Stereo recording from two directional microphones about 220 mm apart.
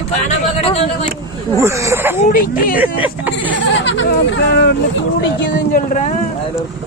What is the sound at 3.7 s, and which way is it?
Speech, 55° left (ahead or behind).